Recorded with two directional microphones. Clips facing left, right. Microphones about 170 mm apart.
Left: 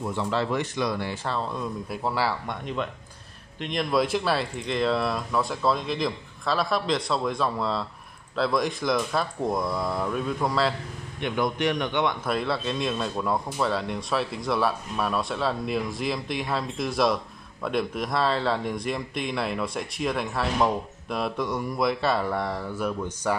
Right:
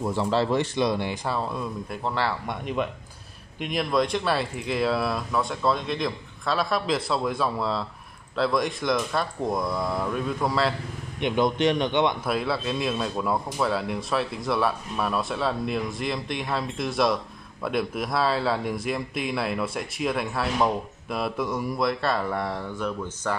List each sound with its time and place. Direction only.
0.0 s speech: 35° right (ahead or behind); by 2.3 s 5° left (ahead or behind)
2.4 s a man's voice: 10° right (ahead or behind)
3.9 s speech: 5° left (ahead or behind)
11.1 s speech: 20° right (ahead or behind)
12.3 s speech: centre (ahead or behind)